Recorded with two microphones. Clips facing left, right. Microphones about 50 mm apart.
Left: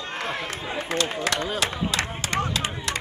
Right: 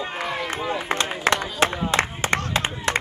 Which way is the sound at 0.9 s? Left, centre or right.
Right.